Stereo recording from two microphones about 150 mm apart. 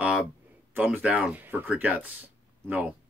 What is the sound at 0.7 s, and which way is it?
Speech, 10° right (ahead or behind).